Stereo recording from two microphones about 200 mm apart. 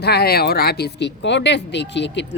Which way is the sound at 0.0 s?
55° left (ahead or behind).